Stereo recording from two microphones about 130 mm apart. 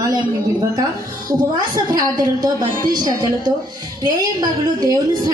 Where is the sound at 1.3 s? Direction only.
30° right (ahead or behind).